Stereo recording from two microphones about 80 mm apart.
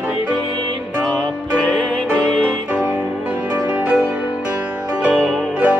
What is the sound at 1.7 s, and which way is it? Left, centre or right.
Music, centre.